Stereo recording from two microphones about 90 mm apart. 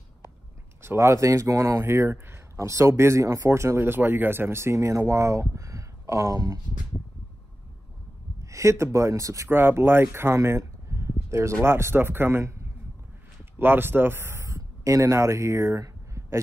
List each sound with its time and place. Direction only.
0.8 s speech: 30° right (ahead or behind)
8.5 s speech: 35° right (ahead or behind)
9.5 s speech: 25° right (ahead or behind)
13.6 s a man's voice: 25° right (ahead or behind)